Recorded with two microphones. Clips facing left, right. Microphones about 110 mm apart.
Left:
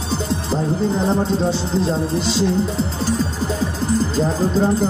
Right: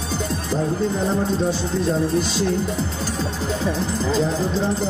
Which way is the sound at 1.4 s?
30° left (ahead or behind).